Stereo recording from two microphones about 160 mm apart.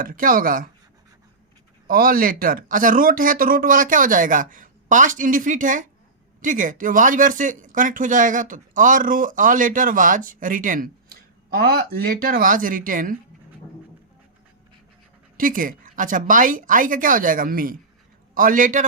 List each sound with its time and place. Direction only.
0.0 s speech: 60° right (ahead or behind)
1.9 s speech: 65° right (ahead or behind)
15.4 s speech: 60° right (ahead or behind)